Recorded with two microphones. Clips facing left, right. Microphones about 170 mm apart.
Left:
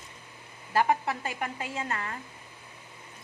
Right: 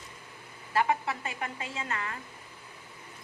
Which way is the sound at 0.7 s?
40° left (ahead or behind).